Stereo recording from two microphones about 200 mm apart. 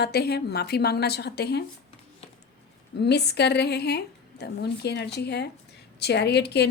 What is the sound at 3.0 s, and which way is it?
A woman's voice, 55° left (ahead or behind).